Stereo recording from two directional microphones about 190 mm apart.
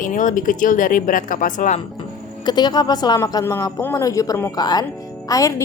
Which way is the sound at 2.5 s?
20° left (ahead or behind).